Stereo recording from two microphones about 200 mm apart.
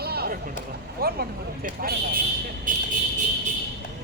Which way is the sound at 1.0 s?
50° right (ahead or behind).